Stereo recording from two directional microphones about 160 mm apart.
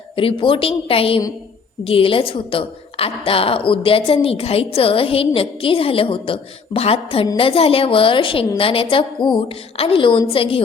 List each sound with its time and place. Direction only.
0.2 s a woman's voice: 35° left (ahead or behind)